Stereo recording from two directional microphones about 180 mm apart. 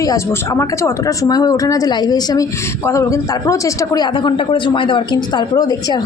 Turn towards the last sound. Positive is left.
turn(degrees=25)  # may be behind; listen again after turning